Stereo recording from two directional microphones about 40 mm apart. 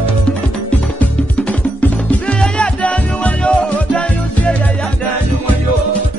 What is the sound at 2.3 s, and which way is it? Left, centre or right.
Music, left.